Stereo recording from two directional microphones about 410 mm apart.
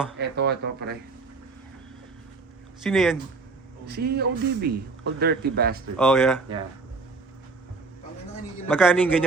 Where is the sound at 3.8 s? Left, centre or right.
Right.